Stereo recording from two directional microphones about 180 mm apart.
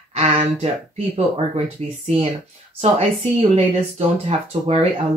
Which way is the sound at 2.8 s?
35° right (ahead or behind).